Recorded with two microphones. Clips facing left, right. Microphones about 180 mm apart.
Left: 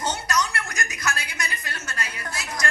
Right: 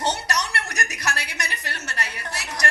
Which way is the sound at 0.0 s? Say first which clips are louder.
Even; 70° right (ahead or behind).